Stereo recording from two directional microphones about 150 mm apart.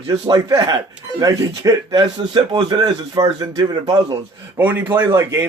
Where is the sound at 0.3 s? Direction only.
25° right (ahead or behind).